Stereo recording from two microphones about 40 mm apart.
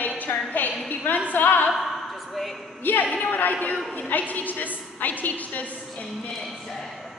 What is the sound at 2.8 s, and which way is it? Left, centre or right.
Speech, left.